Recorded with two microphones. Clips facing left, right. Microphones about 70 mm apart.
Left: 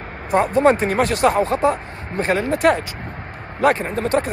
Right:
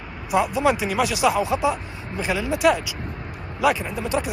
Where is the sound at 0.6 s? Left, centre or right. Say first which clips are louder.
Left 5 dB; left.